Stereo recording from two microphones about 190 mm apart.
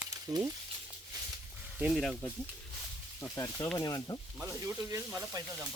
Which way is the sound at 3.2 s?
15° left (ahead or behind).